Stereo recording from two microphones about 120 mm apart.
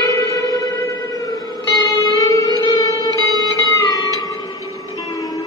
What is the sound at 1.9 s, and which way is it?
Music, 30° left (ahead or behind).